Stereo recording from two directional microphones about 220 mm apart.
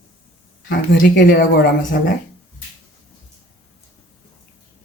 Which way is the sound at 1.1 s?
45° left (ahead or behind).